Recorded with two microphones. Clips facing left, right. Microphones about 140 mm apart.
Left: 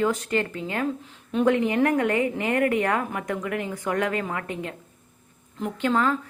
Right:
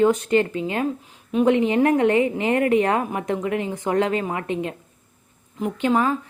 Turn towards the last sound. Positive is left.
turn(degrees=-15)  # may be behind; listen again after turning